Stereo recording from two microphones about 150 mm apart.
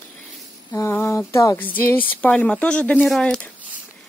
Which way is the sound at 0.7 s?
20° left (ahead or behind).